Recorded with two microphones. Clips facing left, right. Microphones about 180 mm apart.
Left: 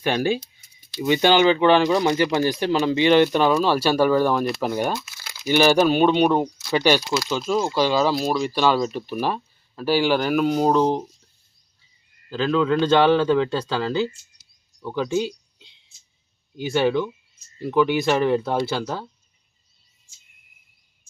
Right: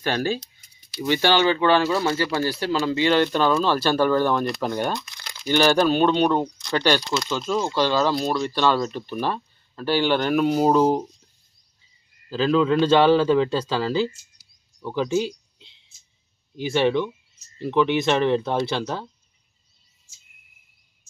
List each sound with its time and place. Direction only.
0.0 s speech: 15° left (ahead or behind); by 11.0 s 5° right (ahead or behind)
12.3 s speech: 5° right (ahead or behind)